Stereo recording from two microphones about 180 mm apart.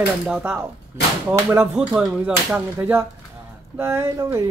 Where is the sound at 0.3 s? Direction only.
10° right (ahead or behind).